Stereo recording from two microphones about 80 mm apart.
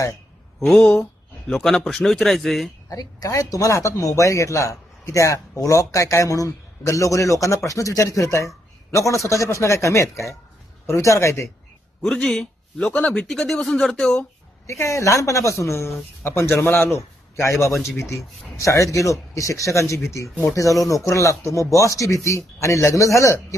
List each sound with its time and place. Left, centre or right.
0.7 s a man's voice: centre
2.9 s speech: left
12.0 s a man's voice: centre
14.7 s speech: left
16.9 s a man's voice: left